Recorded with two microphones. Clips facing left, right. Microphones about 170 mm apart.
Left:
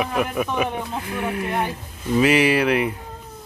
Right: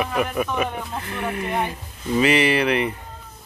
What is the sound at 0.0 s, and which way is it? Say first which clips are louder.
Speech: even; centre (ahead or behind).